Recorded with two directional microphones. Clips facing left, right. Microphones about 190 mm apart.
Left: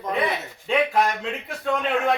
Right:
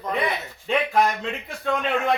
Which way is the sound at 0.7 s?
Centre (ahead or behind).